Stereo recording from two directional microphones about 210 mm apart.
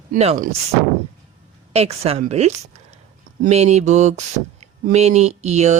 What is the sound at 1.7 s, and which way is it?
Speech, 30° right (ahead or behind).